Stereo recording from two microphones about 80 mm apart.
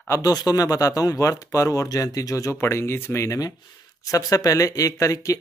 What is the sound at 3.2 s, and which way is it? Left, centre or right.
A man's voice, left.